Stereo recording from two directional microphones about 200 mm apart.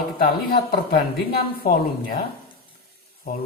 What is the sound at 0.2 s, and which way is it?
A woman's voice, 50° left (ahead or behind).